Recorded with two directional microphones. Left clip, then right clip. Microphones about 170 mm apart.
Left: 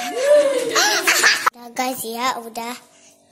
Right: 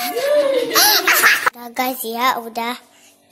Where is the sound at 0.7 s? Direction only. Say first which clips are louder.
Right 4 dB; 5° right (ahead or behind).